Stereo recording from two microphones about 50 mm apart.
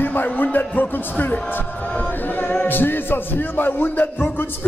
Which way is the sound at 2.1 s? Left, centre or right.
Left.